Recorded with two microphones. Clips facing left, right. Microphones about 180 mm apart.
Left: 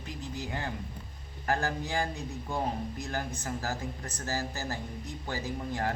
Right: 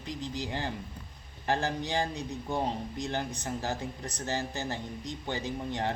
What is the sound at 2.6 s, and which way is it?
Speech, 30° right (ahead or behind).